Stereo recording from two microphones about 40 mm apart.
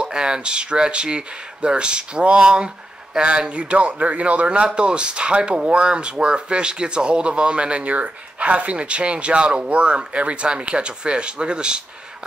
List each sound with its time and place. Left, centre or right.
0.0 s speech: centre